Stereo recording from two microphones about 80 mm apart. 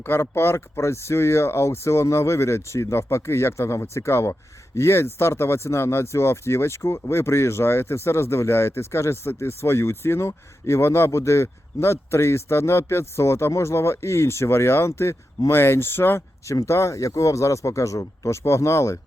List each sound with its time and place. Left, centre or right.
0.0 s speech: left